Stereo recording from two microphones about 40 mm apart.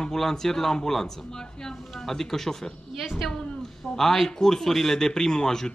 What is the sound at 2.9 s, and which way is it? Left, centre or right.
Speech, centre.